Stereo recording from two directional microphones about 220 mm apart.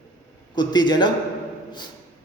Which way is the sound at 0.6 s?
20° left (ahead or behind).